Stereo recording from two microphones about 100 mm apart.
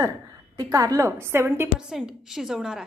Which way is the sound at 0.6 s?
35° right (ahead or behind).